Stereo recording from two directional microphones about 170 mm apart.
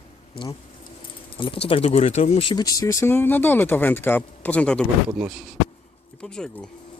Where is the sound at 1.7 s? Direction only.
35° left (ahead or behind).